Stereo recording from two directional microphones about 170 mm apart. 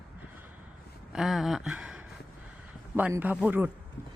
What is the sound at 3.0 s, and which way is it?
Speech, 10° right (ahead or behind).